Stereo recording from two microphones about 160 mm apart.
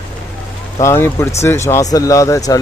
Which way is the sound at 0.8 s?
15° left (ahead or behind).